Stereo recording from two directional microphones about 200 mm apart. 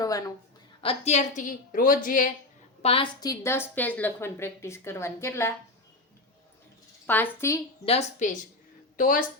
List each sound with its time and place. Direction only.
0.0 s a sound: 15° left (ahead or behind)
0.8 s a woman's voice: 30° left (ahead or behind)
2.8 s a woman's voice: 25° left (ahead or behind)
7.1 s a woman's voice: 10° left (ahead or behind)
7.9 s a woman's voice: 35° left (ahead or behind)